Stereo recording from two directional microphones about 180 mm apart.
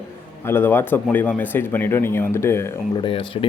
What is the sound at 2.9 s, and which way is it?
Speech, 30° left (ahead or behind).